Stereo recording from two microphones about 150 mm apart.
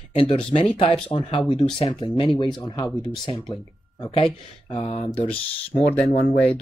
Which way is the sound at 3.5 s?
30° left (ahead or behind).